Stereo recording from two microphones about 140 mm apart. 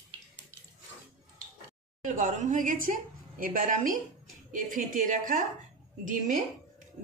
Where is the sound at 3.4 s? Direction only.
85° right.